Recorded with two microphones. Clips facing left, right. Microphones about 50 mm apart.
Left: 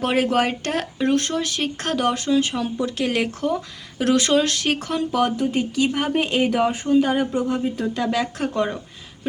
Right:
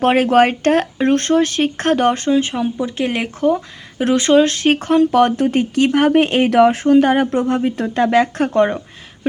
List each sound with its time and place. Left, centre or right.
0.0 s speech: right